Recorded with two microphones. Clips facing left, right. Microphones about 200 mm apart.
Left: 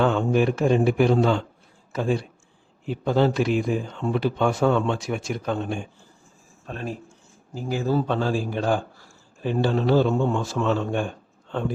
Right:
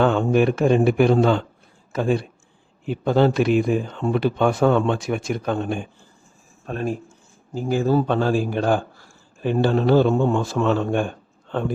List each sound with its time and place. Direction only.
0.0 s a man's voice: 60° right (ahead or behind)